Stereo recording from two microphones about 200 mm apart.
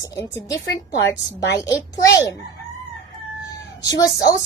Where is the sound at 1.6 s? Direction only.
15° left (ahead or behind).